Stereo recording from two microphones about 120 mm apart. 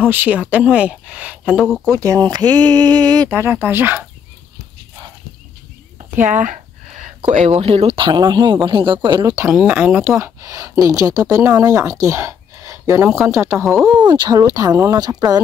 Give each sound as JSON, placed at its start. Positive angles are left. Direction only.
{"t": 0.1, "sound": "speech", "side_deg": -15}
{"t": 1.9, "sound": "speech", "side_deg": -25}
{"t": 3.3, "sound": "speech", "side_deg": -20}
{"t": 6.2, "sound": "a sound", "side_deg": -90}
{"t": 7.2, "sound": "speech", "side_deg": -70}
{"t": 9.5, "sound": "speech", "side_deg": -10}
{"t": 10.1, "sound": "speech", "side_deg": -25}
{"t": 13.7, "sound": "speech", "side_deg": -5}
{"t": 14.0, "sound": "speech", "side_deg": -40}